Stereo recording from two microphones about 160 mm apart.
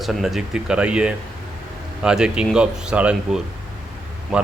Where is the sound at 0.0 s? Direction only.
Centre (ahead or behind).